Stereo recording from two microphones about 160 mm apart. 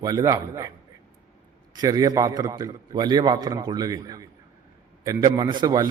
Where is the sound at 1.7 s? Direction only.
25° right (ahead or behind).